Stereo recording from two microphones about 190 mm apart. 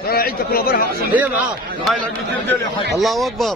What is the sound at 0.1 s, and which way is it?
Speech, 50° left (ahead or behind).